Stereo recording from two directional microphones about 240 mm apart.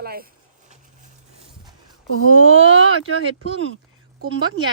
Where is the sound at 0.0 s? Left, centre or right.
Right.